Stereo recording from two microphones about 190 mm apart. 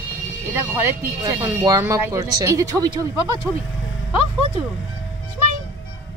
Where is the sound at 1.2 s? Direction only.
20° right (ahead or behind).